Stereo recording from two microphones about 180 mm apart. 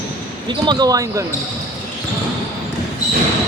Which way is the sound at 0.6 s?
25° right (ahead or behind).